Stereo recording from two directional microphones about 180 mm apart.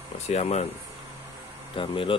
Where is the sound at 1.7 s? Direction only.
30° left (ahead or behind).